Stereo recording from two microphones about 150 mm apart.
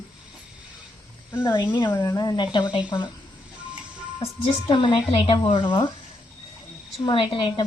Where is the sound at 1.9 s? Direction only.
20° left (ahead or behind).